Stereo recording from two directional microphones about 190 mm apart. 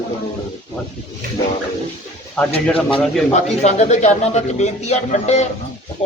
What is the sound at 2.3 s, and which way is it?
Speech, 5° left (ahead or behind).